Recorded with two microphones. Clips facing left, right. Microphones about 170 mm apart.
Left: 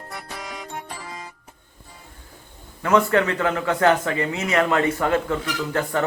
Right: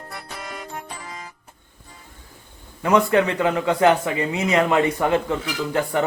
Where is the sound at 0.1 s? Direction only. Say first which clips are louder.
Left 1 dB; centre (ahead or behind).